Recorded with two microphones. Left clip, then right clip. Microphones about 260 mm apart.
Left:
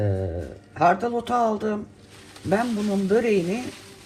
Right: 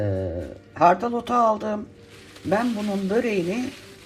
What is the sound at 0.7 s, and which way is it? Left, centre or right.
Speech, right.